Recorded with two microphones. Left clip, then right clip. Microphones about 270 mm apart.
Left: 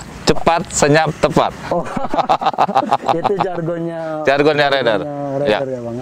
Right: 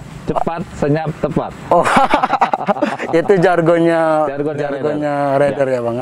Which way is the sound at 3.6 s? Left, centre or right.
Centre.